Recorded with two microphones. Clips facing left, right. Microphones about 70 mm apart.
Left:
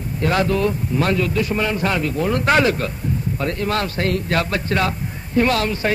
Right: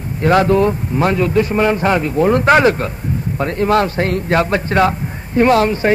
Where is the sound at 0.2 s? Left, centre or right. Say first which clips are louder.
Right 6 dB; right.